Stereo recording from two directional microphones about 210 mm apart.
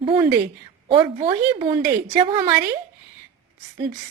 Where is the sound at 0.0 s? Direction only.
20° right (ahead or behind).